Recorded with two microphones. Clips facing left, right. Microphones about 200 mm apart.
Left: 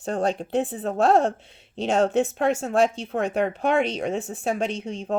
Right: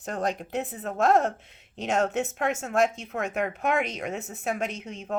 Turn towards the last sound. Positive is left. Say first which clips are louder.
# left 5 dB
turn(degrees=30)  # may be behind; listen again after turning